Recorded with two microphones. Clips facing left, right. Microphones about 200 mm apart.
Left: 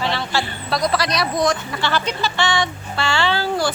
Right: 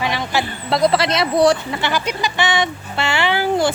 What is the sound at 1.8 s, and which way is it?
Speech, 15° right (ahead or behind).